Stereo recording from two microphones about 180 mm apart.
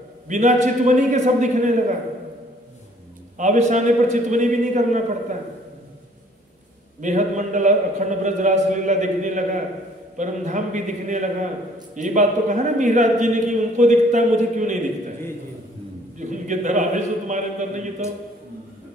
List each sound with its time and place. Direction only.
0.3 s a man's voice: 40° right (ahead or behind)
3.3 s a man's voice: 40° right (ahead or behind)
7.0 s a man's voice: 45° right (ahead or behind)
16.2 s a man's voice: 45° right (ahead or behind)